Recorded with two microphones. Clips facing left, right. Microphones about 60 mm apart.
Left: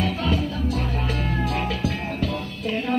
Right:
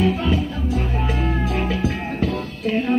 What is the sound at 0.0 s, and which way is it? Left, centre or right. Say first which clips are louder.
Music: right 4 dB; centre.